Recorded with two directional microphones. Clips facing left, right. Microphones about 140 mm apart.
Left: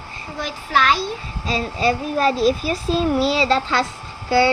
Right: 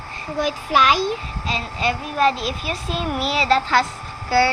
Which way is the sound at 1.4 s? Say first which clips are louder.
Left 4 dB; 35° left (ahead or behind).